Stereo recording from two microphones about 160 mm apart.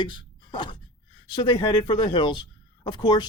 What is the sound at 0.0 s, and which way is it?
Speech, 30° left (ahead or behind).